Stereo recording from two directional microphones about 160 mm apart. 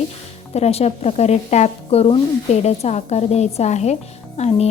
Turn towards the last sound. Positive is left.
turn(degrees=40)  # may be behind; listen again after turning